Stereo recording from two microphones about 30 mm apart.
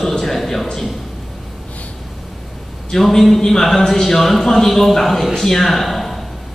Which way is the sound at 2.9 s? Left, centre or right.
Centre.